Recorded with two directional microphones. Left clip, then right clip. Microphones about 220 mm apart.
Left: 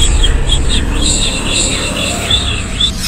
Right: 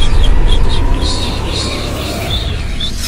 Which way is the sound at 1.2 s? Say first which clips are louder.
Left 4 dB; 10° left (ahead or behind).